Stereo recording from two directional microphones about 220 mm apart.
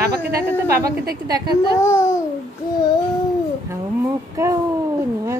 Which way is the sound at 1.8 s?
15° left (ahead or behind).